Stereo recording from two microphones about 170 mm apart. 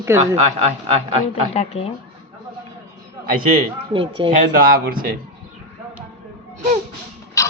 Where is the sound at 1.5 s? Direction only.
40° left (ahead or behind).